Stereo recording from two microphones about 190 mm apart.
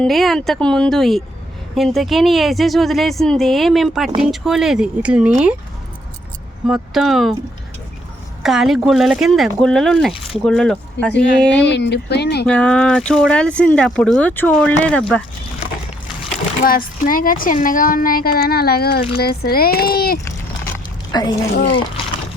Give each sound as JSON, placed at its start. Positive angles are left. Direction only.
{"t": 0.0, "sound": "speech", "side_deg": 0}
{"t": 6.7, "sound": "speech", "side_deg": 0}
{"t": 8.4, "sound": "speech", "side_deg": 0}
{"t": 11.1, "sound": "speech", "side_deg": 65}
{"t": 12.5, "sound": "speech", "side_deg": 5}
{"t": 16.6, "sound": "speech", "side_deg": 50}
{"t": 21.1, "sound": "a woman's voice", "side_deg": 20}